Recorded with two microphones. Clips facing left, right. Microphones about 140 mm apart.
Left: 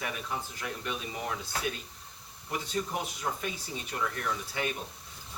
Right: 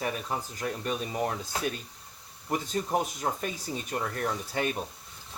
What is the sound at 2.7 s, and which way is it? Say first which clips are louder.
Speech: right 4 dB; 40° right (ahead or behind).